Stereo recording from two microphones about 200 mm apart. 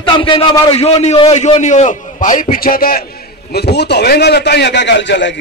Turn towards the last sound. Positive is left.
turn(degrees=65)  # may be behind; listen again after turning